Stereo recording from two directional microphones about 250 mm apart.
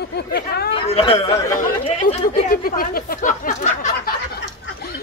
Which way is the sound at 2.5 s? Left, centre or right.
Left.